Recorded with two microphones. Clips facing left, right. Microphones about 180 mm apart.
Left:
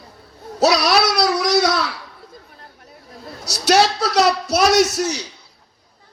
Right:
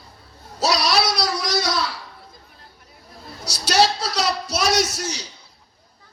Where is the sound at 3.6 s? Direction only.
60° left (ahead or behind).